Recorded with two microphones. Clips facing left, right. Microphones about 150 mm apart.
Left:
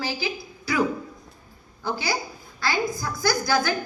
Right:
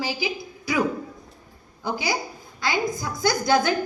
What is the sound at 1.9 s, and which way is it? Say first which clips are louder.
A woman's voice: right 1 dB; 15° right (ahead or behind).